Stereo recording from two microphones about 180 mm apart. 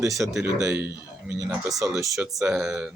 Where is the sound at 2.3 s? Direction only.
5° right (ahead or behind).